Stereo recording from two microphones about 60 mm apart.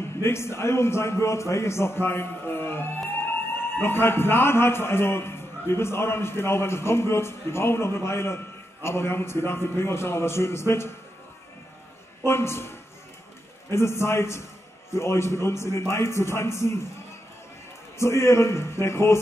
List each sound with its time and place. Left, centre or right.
0.2 s a man's voice: left
12.2 s a man's voice: left
17.9 s a man's voice: left